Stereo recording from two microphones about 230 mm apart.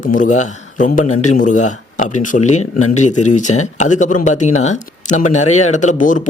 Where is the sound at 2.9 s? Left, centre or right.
Left.